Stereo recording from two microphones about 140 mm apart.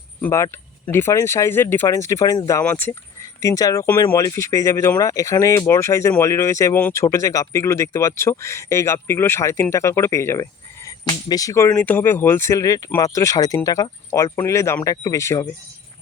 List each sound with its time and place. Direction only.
0.2 s speech: 20° left (ahead or behind)
2.6 s speech: 15° left (ahead or behind)
3.4 s speech: 25° left (ahead or behind)